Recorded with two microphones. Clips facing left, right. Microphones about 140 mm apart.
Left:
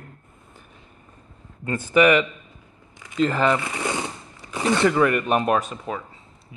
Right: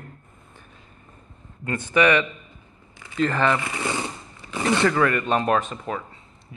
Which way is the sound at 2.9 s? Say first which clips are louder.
Left 1 dB; 20° left (ahead or behind).